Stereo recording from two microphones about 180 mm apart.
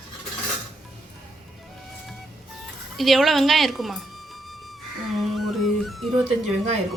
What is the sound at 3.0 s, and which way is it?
A woman's voice, centre (ahead or behind).